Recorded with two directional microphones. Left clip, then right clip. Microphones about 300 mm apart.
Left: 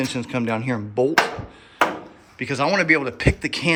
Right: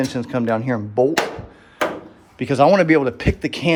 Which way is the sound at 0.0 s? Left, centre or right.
Centre.